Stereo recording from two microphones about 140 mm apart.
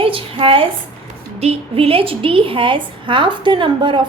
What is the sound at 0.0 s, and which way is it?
A woman's voice, 40° right (ahead or behind).